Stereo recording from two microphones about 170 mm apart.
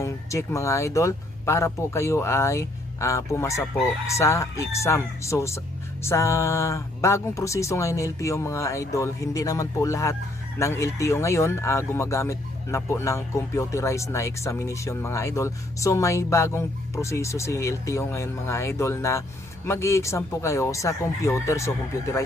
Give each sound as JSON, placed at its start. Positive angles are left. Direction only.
{"t": 0.0, "sound": "speech", "side_deg": 15}